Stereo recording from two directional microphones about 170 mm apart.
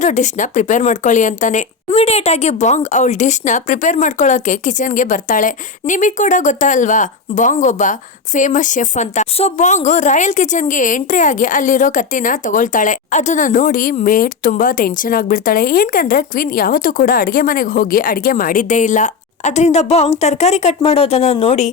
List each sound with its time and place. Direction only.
0.0 s speech: 45° left (ahead or behind)